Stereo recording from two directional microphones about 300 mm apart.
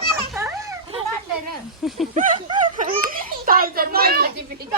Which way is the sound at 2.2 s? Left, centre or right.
Right.